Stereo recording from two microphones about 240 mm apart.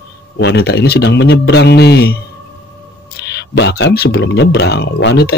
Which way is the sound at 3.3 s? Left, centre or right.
Left.